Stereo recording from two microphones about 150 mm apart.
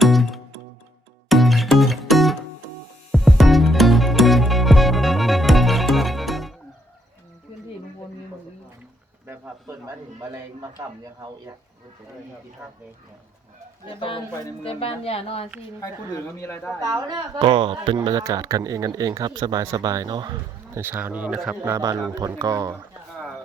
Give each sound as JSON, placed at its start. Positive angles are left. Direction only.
{"t": 0.0, "sound": "music", "side_deg": 0}
{"t": 9.2, "sound": "a sound", "side_deg": -15}
{"t": 14.6, "sound": "speech", "side_deg": 40}
{"t": 15.8, "sound": "speech", "side_deg": 15}
{"t": 16.8, "sound": "a woman's voice", "side_deg": -25}
{"t": 17.9, "sound": "speech", "side_deg": -25}
{"t": 20.7, "sound": "a man's voice", "side_deg": -15}
{"t": 21.5, "sound": "speech", "side_deg": -20}